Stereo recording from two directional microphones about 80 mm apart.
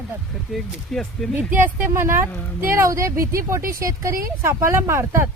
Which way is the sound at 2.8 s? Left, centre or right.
Right.